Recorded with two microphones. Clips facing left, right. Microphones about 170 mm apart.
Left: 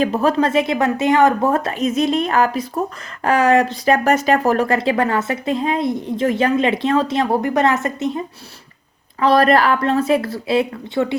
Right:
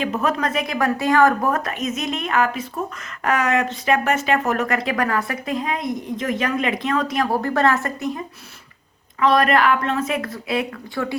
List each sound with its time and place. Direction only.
0.0 s speech: 35° left (ahead or behind)
9.2 s speech: 35° left (ahead or behind)